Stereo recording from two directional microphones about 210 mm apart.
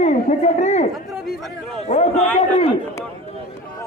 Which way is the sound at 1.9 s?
30° left (ahead or behind).